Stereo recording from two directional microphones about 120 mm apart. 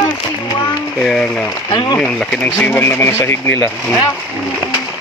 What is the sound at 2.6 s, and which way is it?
Speech, 20° left (ahead or behind).